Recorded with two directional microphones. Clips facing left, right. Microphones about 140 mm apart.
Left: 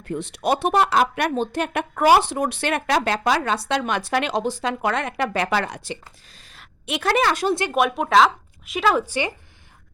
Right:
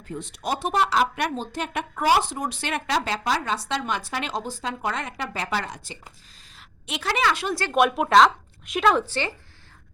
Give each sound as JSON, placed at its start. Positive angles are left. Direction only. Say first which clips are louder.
{"t": 0.0, "sound": "speech", "louder": "left 7 dB", "side_deg": 70}
{"t": 7.7, "sound": "speech", "louder": "right 4 dB", "side_deg": 0}
{"t": 9.0, "sound": "speech", "louder": "left 3 dB", "side_deg": 15}